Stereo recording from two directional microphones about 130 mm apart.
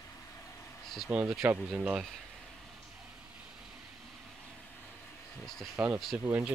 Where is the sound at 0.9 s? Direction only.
10° right (ahead or behind).